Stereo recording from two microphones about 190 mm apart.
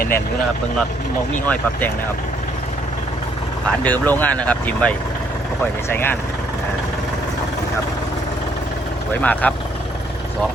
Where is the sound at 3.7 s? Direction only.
10° left (ahead or behind).